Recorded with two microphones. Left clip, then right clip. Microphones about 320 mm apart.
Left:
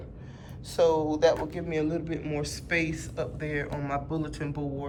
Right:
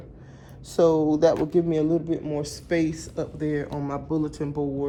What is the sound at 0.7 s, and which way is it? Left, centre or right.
Speech, centre.